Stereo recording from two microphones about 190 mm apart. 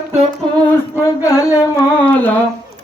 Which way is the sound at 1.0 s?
15° left (ahead or behind).